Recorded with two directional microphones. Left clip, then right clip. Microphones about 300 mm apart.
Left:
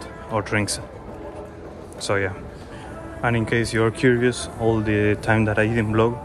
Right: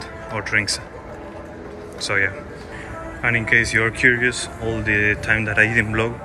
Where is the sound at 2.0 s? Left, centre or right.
Centre.